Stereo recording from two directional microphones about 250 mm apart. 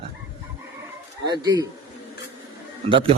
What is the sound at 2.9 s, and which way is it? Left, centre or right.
Speech, centre.